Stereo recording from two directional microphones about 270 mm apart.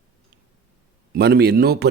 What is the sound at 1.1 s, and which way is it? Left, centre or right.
Speech, right.